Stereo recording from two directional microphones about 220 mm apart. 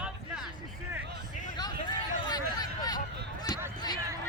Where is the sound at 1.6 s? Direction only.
20° left (ahead or behind).